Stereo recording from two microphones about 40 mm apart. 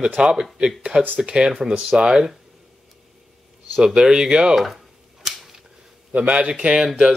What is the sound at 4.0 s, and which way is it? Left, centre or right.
Speech, centre.